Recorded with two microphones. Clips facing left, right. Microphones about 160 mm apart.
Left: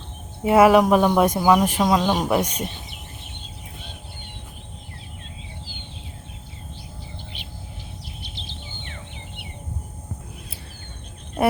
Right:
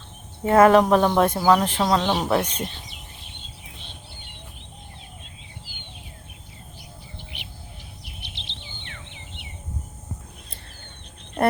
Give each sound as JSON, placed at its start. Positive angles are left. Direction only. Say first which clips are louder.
{"t": 0.4, "sound": "speech", "louder": "left 1 dB", "side_deg": 10}
{"t": 8.2, "sound": "a sound", "louder": "left 4 dB", "side_deg": -70}
{"t": 11.4, "sound": "cricket", "louder": "left 1 dB", "side_deg": 5}